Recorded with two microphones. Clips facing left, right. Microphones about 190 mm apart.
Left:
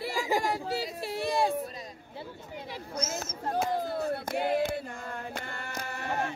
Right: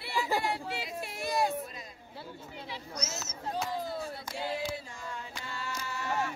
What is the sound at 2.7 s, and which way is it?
Speech, 50° left (ahead or behind).